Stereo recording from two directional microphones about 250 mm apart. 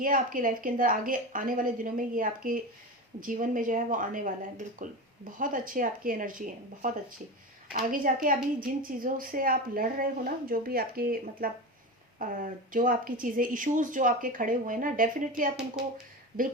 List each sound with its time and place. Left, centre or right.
0.0 s a woman's voice: right